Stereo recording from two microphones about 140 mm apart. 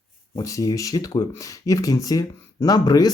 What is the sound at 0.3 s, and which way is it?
Speech, 25° left (ahead or behind).